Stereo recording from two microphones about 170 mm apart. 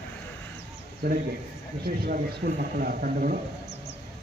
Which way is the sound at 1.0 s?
65° right (ahead or behind).